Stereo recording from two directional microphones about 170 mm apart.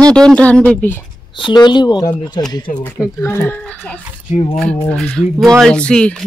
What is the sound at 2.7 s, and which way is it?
Speech, 45° left (ahead or behind).